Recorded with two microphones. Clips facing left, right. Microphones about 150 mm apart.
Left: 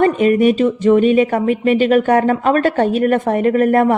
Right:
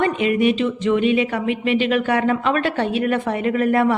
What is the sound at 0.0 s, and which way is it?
Speech, 45° left (ahead or behind).